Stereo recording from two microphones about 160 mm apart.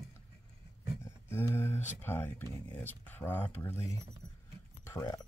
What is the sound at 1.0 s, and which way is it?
Speech, 15° left (ahead or behind).